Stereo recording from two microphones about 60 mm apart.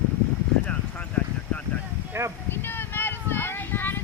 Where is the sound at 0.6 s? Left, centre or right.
Left.